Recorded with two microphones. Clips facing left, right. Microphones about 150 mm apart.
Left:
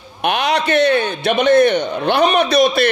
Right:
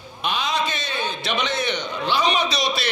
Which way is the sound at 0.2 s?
65° left (ahead or behind).